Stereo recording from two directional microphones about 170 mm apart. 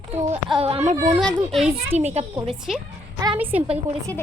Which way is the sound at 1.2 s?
Centre (ahead or behind).